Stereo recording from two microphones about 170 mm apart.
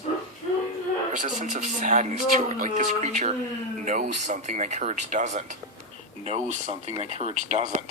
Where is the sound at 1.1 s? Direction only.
45° right (ahead or behind).